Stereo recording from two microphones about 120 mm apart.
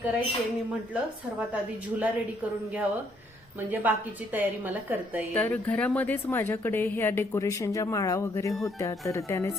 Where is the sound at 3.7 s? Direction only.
15° right (ahead or behind).